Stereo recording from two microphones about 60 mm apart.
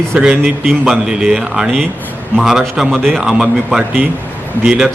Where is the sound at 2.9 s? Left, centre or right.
Centre.